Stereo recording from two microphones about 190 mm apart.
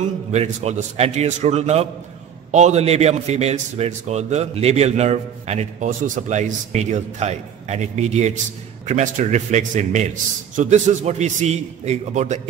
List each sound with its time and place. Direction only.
0.0 s a man's voice: 35° right (ahead or behind)